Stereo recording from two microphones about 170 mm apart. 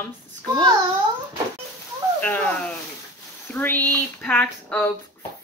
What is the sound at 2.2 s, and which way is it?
Speech, 10° left (ahead or behind).